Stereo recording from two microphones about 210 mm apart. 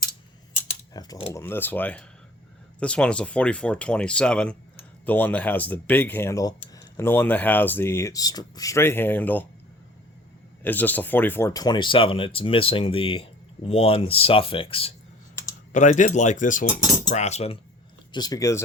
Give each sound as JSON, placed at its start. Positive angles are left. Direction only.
{"t": 0.9, "sound": "speech", "side_deg": 20}
{"t": 10.6, "sound": "speech", "side_deg": 10}
{"t": 18.1, "sound": "speech", "side_deg": 20}